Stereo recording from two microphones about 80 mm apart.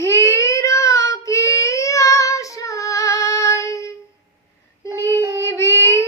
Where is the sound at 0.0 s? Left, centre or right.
Left.